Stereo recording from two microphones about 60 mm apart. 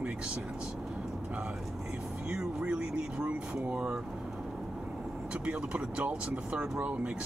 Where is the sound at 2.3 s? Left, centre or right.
Centre.